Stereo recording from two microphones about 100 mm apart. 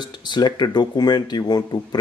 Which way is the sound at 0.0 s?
50° left (ahead or behind).